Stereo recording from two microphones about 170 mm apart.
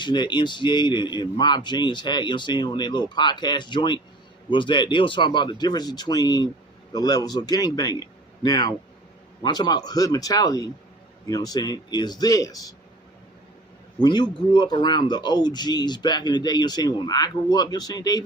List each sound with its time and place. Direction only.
0.0 s a man's voice: 25° left (ahead or behind)
14.0 s a man's voice: 25° left (ahead or behind)